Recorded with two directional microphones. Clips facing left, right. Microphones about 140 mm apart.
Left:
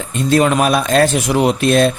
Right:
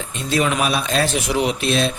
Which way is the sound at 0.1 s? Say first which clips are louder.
Left 7 dB; 50° left (ahead or behind).